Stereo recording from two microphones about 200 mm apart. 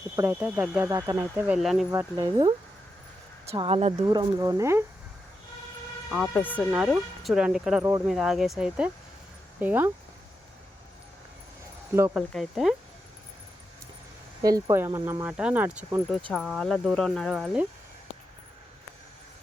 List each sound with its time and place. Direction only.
0.2 s speech: 10° right (ahead or behind)
1.9 s speech: 15° right (ahead or behind)
4.0 s speech: 20° right (ahead or behind)
6.1 s speech: centre (ahead or behind)
6.7 s speech: 5° right (ahead or behind)
12.1 s speech: centre (ahead or behind)
14.4 s speech: 15° right (ahead or behind)